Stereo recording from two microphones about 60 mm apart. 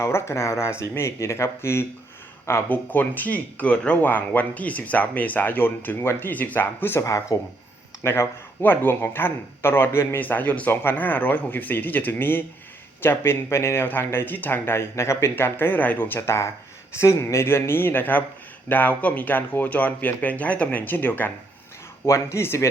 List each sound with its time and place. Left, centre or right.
0.0 s speech: left
2.6 s speech: left
7.0 s speech: left
8.0 s speech: left
10.2 s speech: left
13.8 s speech: left
16.2 s speech: left
22.0 s speech: left